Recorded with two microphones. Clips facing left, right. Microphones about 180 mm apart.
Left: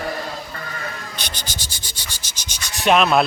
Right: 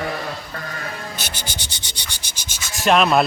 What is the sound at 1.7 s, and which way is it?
Sanding, 60° right (ahead or behind).